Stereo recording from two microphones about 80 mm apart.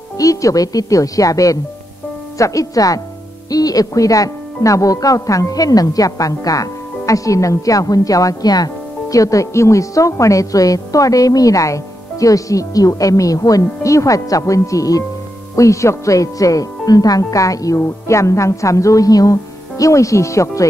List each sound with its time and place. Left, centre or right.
0.2 s a woman's voice: left
9.1 s a woman's voice: left